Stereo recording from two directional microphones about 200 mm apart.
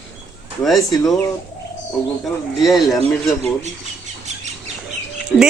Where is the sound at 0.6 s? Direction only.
Centre (ahead or behind).